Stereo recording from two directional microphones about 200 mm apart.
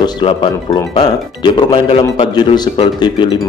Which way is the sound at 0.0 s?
25° left (ahead or behind).